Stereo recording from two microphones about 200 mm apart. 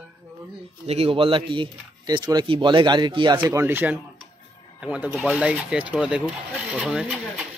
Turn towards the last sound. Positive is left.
turn(degrees=-5)  # may be behind; listen again after turning